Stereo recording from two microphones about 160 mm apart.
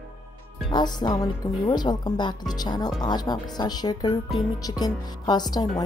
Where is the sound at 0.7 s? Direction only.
25° left (ahead or behind).